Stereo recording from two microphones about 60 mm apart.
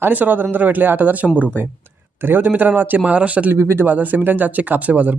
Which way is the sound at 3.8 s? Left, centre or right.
Right.